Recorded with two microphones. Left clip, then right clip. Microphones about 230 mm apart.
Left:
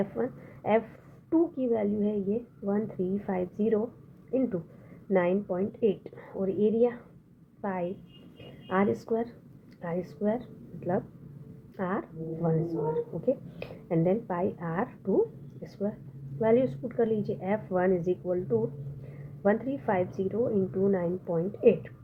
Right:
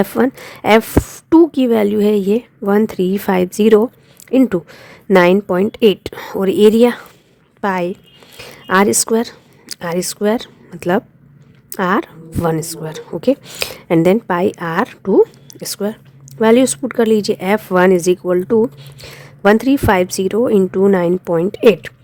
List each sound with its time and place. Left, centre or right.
0.0 s a woman's voice: right